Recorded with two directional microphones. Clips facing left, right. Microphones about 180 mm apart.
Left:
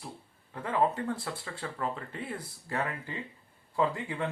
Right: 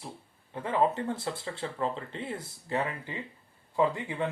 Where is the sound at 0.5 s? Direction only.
25° right (ahead or behind).